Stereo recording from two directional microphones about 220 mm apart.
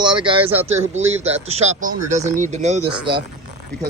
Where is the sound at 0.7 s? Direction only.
30° right (ahead or behind).